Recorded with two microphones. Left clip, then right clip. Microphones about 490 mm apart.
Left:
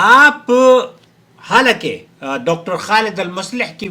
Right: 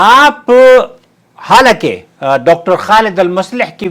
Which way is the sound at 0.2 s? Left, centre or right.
Right.